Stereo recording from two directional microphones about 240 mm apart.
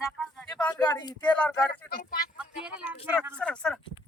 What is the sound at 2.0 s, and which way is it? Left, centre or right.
Speech, left.